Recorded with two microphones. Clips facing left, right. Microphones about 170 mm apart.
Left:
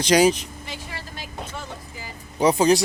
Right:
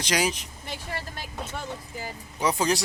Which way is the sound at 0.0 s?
30° left (ahead or behind).